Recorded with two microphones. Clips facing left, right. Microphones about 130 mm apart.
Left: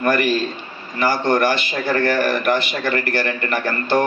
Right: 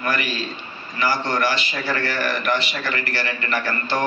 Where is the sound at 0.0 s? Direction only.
50° left (ahead or behind).